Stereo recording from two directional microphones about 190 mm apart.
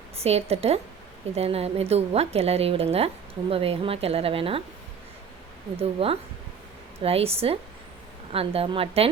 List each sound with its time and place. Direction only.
0.2 s speech: 30° right (ahead or behind)
5.8 s speech: 30° right (ahead or behind)